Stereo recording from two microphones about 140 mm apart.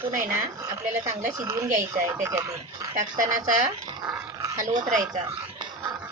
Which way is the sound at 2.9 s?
65° right (ahead or behind).